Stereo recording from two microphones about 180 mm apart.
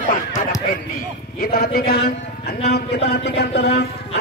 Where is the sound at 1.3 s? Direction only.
55° left (ahead or behind).